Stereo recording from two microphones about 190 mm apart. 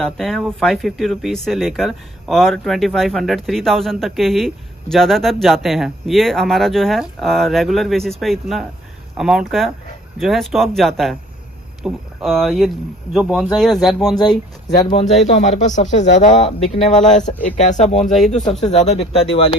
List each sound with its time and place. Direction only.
0.0 s speech: centre (ahead or behind)
14.9 s speech: 35° left (ahead or behind)
17.9 s speech: centre (ahead or behind)
18.7 s speech: 30° left (ahead or behind)